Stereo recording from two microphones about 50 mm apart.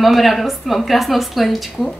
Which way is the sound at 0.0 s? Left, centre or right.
Centre.